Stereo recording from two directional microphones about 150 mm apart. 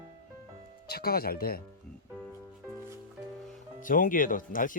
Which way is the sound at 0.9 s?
90° left.